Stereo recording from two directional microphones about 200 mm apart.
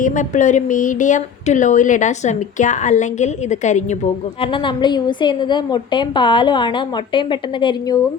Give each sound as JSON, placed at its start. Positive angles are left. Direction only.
{"t": 0.0, "sound": "speech", "side_deg": 40}
{"t": 4.4, "sound": "a woman's voice", "side_deg": 25}